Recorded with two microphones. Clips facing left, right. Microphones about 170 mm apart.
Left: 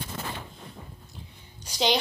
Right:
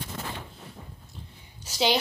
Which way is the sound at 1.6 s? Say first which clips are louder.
Even; 5° right (ahead or behind).